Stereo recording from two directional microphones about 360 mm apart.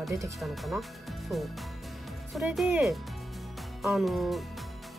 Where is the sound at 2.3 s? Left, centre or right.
Centre.